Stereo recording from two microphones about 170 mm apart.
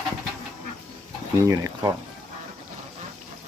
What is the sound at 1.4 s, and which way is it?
Speech, 20° right (ahead or behind).